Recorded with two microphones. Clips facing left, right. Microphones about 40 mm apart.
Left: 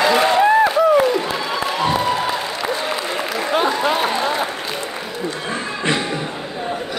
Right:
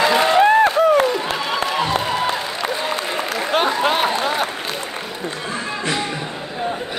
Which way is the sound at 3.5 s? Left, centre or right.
Right.